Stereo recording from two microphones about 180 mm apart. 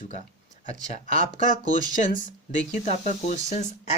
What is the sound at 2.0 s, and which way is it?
Speech, 45° left (ahead or behind).